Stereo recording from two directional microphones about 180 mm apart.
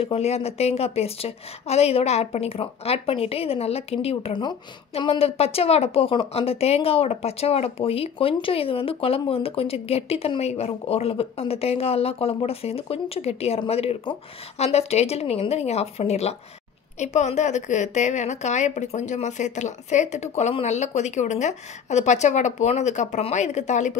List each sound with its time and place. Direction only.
0.0 s a woman's voice: 35° left (ahead or behind)